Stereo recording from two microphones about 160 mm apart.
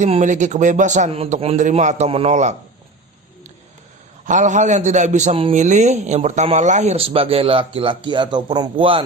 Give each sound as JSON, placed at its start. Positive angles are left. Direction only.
{"t": 0.0, "sound": "a man's voice", "side_deg": -50}
{"t": 4.3, "sound": "a man's voice", "side_deg": -50}